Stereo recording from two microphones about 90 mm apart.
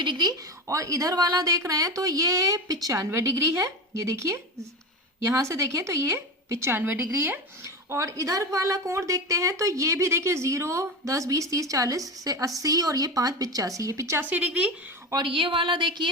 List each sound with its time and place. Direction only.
0.0 s a woman's voice: 55° right (ahead or behind); by 14.2 s 35° right (ahead or behind)
14.2 s speech: 20° right (ahead or behind)
15.1 s speech: 65° right (ahead or behind)